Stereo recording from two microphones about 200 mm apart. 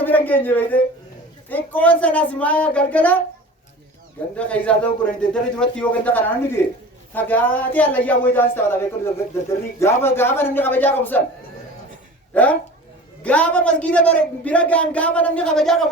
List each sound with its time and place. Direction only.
0.0 s a man's voice: 10° left (ahead or behind)
4.4 s speech: 5° left (ahead or behind)
12.3 s speech: 5° left (ahead or behind)